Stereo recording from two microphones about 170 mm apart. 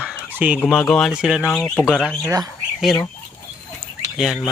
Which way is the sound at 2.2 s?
20° right (ahead or behind).